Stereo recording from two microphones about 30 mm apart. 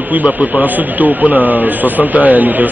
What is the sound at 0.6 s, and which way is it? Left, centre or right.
Speech, right.